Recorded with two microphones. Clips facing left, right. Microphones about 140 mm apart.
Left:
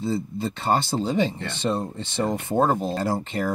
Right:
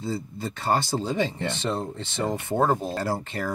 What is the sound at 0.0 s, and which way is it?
Speech, 20° left (ahead or behind).